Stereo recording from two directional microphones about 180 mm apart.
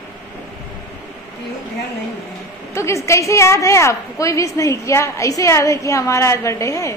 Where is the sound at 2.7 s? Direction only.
15° left (ahead or behind).